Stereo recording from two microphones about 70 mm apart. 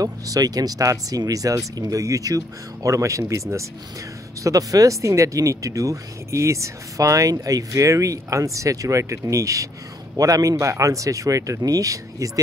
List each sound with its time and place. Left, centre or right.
0.0 s speech: right